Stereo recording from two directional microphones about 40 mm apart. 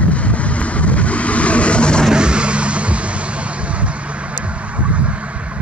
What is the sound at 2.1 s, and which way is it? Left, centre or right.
Vehicle, right.